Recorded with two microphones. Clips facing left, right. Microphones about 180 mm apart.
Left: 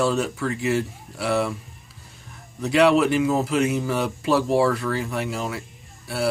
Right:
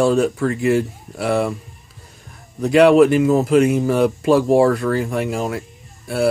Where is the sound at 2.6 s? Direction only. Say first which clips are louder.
Right 7 dB; 50° right (ahead or behind).